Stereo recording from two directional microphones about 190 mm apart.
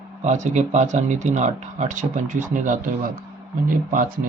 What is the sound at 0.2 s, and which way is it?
Speech, 40° right (ahead or behind).